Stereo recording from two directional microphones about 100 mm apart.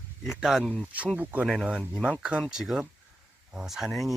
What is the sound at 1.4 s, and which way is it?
Speech, centre (ahead or behind).